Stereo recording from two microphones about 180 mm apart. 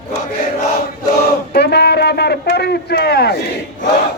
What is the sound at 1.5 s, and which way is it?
A man's voice, 65° left (ahead or behind).